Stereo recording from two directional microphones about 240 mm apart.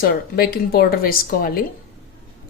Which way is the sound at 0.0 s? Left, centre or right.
Left.